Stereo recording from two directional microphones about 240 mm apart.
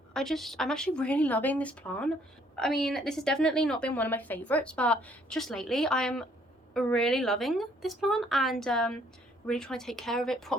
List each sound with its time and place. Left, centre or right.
0.1 s a woman's voice: centre